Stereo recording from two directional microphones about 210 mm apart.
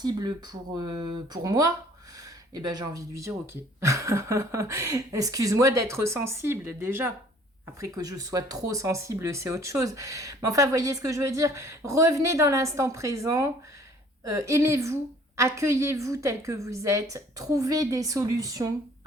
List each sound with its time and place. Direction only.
0.0 s speech: 20° right (ahead or behind)